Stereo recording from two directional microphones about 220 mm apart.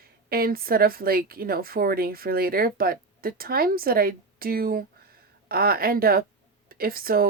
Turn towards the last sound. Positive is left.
turn(degrees=-40)  # may be behind; listen again after turning